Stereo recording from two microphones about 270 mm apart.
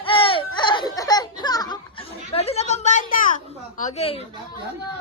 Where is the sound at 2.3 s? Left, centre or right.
Left.